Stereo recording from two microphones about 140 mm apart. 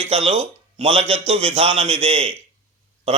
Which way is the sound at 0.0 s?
50° right (ahead or behind).